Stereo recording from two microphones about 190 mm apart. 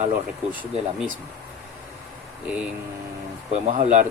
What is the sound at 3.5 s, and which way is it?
Speech, 35° right (ahead or behind).